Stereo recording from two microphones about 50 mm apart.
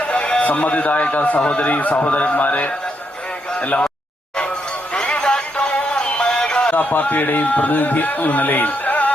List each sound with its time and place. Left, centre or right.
0.0 s a man's voice: left
3.5 s a sound: left
5.0 s music: centre
6.7 s a man's voice: left